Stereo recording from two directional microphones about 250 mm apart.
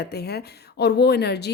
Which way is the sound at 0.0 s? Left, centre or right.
Left.